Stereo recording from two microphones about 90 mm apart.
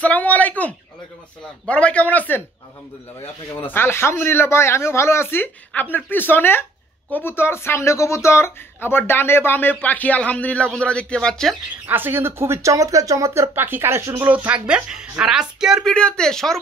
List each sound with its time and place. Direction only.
0.0 s speech: 15° left (ahead or behind)
3.6 s speech: 25° left (ahead or behind); by 11.5 s 5° left (ahead or behind)
11.8 s speech: 25° right (ahead or behind)
14.2 s speech: 15° right (ahead or behind)
15.8 s speech: 10° left (ahead or behind)